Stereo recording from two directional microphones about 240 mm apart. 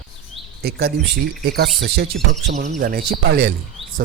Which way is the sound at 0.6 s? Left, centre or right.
Right.